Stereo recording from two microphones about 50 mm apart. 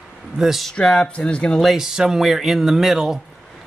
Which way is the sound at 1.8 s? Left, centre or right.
Centre.